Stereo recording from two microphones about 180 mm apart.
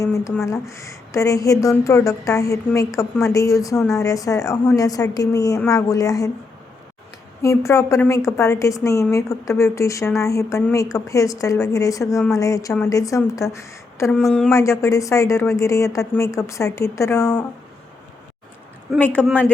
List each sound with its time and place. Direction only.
0.0 s a woman's voice: 15° left (ahead or behind)
7.4 s a woman's voice: 15° left (ahead or behind)
14.1 s a sound: centre (ahead or behind)
14.5 s speech: 15° left (ahead or behind)
18.9 s speech: 10° left (ahead or behind)